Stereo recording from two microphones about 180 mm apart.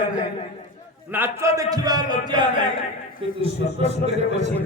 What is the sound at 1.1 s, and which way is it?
A man's voice, 10° right (ahead or behind).